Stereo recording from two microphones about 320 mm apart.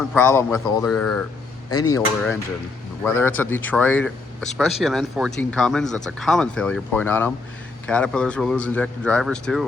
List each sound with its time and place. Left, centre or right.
0.1 s speech: centre
1.7 s speech: left
3.0 s speech: centre